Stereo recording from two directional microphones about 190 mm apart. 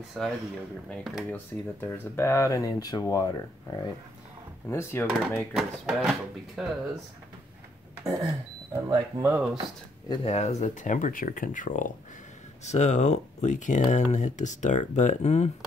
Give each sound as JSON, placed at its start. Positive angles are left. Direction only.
{"t": 0.2, "sound": "speech", "side_deg": 0}
{"t": 1.3, "sound": "speech", "side_deg": 10}
{"t": 5.5, "sound": "speech", "side_deg": 0}
{"t": 8.7, "sound": "speech", "side_deg": -15}
{"t": 10.0, "sound": "speech", "side_deg": 25}